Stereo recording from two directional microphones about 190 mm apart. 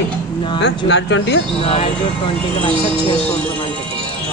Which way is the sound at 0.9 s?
70° left (ahead or behind).